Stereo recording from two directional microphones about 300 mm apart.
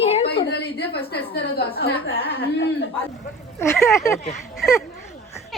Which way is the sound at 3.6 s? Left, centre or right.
Centre.